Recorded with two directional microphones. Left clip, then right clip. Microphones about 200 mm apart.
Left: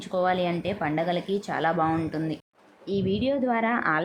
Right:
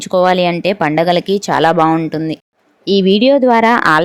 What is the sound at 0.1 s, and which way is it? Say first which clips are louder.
Speech: right 13 dB; 45° right (ahead or behind).